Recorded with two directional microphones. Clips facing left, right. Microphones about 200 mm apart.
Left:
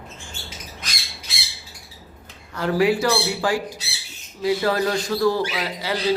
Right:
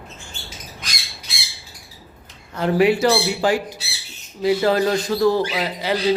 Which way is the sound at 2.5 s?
20° right (ahead or behind).